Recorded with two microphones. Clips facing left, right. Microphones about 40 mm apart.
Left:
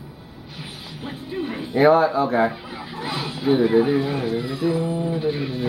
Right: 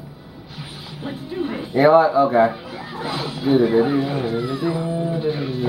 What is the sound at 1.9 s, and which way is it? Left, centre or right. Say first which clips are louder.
Speech: right 3 dB; centre.